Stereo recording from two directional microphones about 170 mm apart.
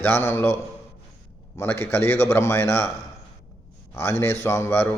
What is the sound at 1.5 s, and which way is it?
A man's voice, 15° left (ahead or behind).